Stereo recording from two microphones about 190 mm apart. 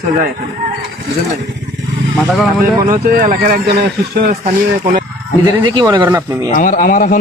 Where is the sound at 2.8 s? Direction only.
50° right (ahead or behind).